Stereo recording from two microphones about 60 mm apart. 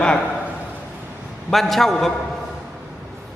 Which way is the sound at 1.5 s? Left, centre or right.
Centre.